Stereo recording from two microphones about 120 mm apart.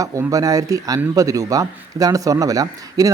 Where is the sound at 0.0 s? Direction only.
30° right (ahead or behind).